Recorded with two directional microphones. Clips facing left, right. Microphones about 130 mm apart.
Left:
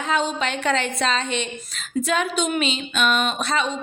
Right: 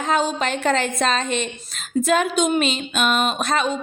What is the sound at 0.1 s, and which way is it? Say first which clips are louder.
A woman's voice: right 2 dB; 40° right (ahead or behind).